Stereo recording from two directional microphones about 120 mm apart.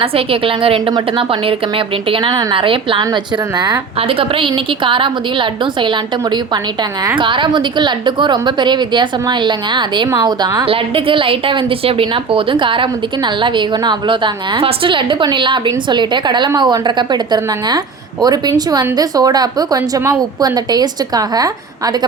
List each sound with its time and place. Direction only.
0.0 s a woman's voice: 50° right (ahead or behind)
4.2 s a woman's voice: 45° right (ahead or behind)
10.7 s a woman's voice: 50° right (ahead or behind); by 21.5 s 30° right (ahead or behind)